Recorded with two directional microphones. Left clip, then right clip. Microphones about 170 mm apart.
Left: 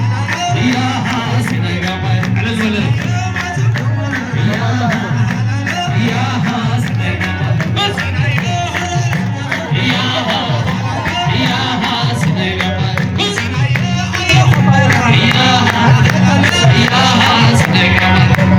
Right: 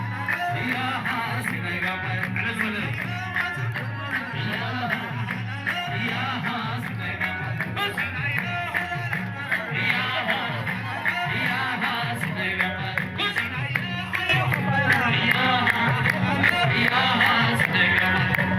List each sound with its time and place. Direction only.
9.8 s music: 30° left (ahead or behind)
11.3 s music: 25° left (ahead or behind)
14.3 s music: centre (ahead or behind)